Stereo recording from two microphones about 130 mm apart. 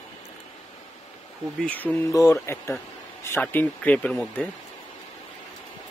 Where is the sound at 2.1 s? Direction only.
25° left (ahead or behind).